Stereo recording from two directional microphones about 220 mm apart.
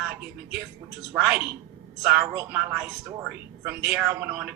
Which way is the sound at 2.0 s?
10° right (ahead or behind).